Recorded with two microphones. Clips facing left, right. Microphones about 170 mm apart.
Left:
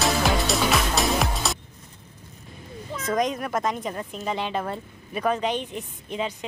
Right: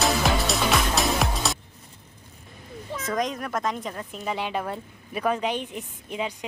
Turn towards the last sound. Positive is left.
turn(degrees=-10)  # may be behind; listen again after turning